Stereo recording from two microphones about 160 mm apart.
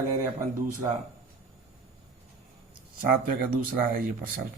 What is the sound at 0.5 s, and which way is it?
Speech, 55° right (ahead or behind).